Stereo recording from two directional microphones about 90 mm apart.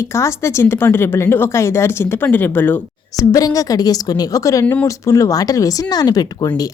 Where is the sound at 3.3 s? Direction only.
40° left (ahead or behind).